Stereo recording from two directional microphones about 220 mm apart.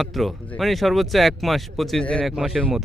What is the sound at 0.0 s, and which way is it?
Speech, centre (ahead or behind).